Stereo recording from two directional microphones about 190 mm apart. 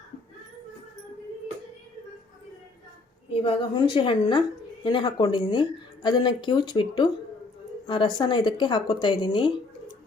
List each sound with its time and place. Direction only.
3.3 s a woman's voice: 30° left (ahead or behind)